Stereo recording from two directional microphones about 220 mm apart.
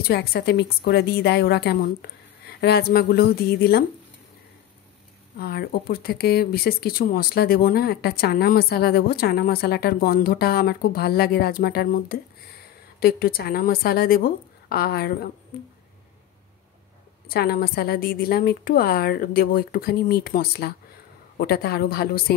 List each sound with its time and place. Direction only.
0.0 s speech: 45° left (ahead or behind)
5.4 s speech: 45° left (ahead or behind)
17.3 s speech: 45° left (ahead or behind)